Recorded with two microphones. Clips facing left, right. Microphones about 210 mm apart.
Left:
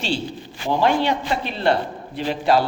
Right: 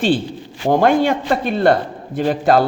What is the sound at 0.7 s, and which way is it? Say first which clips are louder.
Speech: right 5 dB; 50° right (ahead or behind).